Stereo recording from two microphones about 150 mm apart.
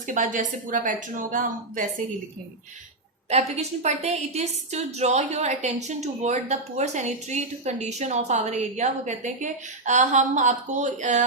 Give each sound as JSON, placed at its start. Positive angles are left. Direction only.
{"t": 0.1, "sound": "speech", "side_deg": -60}
{"t": 3.2, "sound": "a woman's voice", "side_deg": -45}